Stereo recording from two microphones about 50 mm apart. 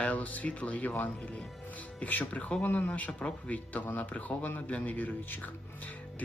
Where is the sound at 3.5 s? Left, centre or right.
Left.